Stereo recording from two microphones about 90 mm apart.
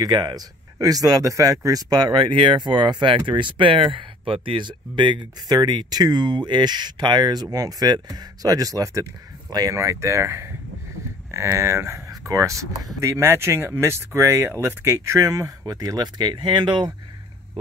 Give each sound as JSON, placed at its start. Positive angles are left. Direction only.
{"t": 0.0, "sound": "speech", "side_deg": -50}
{"t": 2.3, "sound": "speech", "side_deg": -65}
{"t": 11.5, "sound": "speech", "side_deg": -35}
{"t": 13.0, "sound": "speech", "side_deg": -25}